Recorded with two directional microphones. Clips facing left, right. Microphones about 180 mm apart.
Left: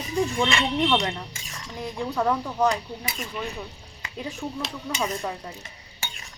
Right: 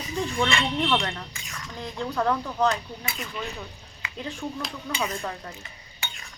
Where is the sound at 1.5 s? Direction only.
25° left (ahead or behind).